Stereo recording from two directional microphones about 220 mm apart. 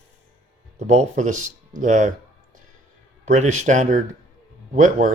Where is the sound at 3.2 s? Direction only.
30° right (ahead or behind).